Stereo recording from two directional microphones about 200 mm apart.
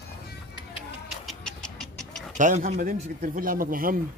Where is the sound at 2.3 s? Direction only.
40° right (ahead or behind).